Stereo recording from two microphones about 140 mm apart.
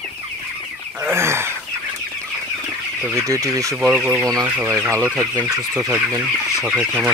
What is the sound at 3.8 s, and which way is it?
Speech, 5° right (ahead or behind).